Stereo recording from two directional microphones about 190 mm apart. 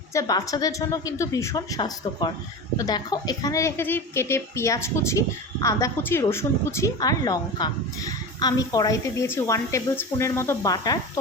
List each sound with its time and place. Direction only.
0.1 s a woman's voice: 20° left (ahead or behind)